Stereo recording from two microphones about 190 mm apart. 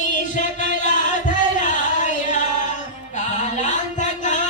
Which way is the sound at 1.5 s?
40° left (ahead or behind).